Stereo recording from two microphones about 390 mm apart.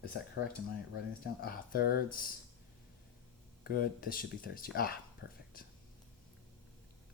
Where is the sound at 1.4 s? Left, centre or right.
Left.